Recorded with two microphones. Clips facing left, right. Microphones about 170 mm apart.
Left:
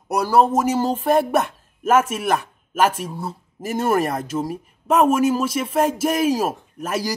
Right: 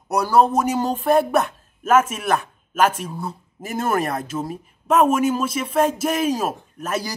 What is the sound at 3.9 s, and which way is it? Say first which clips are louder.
A man's voice: left 2 dB; 10° left (ahead or behind).